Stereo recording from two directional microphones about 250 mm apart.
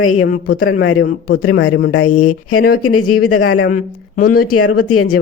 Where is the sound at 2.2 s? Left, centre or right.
Left.